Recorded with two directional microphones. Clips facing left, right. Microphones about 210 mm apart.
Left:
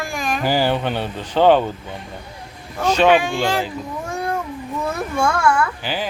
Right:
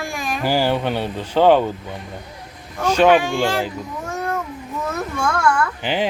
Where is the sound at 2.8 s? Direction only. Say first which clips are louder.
Right 1 dB; 10° right (ahead or behind).